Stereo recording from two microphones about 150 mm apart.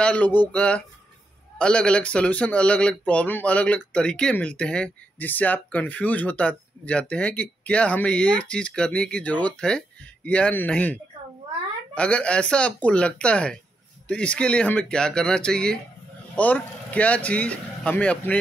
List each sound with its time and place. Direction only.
0.0 s speech: 10° left (ahead or behind)